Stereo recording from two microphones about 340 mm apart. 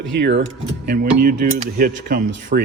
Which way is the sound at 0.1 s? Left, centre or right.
Right.